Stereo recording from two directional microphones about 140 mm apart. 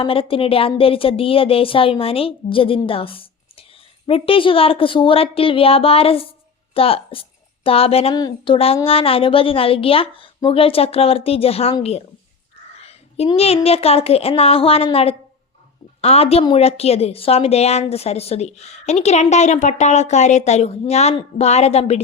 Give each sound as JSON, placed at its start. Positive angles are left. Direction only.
{"t": 0.0, "sound": "a woman's voice", "side_deg": 40}
{"t": 8.1, "sound": "a woman's voice", "side_deg": 30}
{"t": 8.5, "sound": "a woman's voice", "side_deg": 45}
{"t": 16.0, "sound": "a woman's voice", "side_deg": 45}